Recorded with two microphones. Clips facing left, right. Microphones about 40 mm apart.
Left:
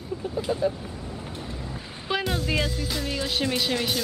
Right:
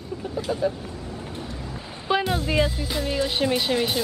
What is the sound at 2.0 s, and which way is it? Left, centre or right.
Speech, centre.